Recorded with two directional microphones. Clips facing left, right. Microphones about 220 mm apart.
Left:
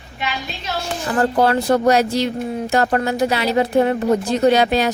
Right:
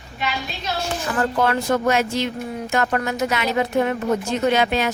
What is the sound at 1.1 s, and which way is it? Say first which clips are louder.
Speech: left 5 dB; 35° left (ahead or behind).